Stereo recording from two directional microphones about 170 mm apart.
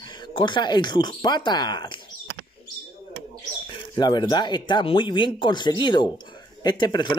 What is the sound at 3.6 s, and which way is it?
Speech, 25° left (ahead or behind).